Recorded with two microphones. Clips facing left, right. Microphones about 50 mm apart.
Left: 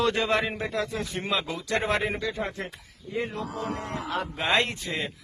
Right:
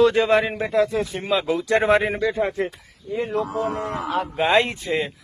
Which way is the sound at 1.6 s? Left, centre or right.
Right.